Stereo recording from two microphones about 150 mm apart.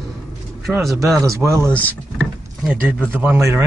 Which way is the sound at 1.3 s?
20° right (ahead or behind).